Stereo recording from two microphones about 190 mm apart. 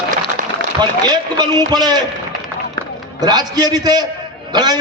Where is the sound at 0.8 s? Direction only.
20° right (ahead or behind).